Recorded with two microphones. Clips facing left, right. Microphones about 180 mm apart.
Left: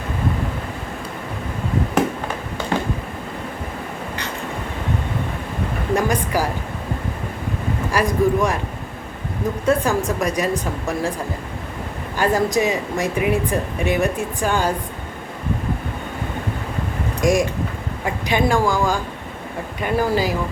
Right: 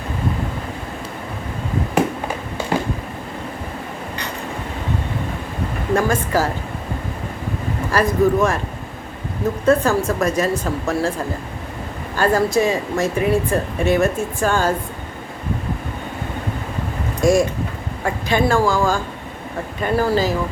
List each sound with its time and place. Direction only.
5.9 s speech: 15° left (ahead or behind)
7.9 s speech: 15° left (ahead or behind)
9.6 s speech: 15° left (ahead or behind)
12.1 s speech: 15° left (ahead or behind)
17.2 s speech: 15° left (ahead or behind)